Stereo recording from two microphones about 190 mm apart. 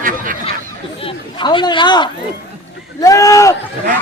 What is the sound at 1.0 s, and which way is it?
Speech, 25° left (ahead or behind).